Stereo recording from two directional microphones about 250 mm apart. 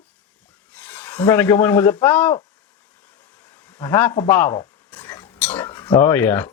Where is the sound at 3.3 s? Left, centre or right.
Centre.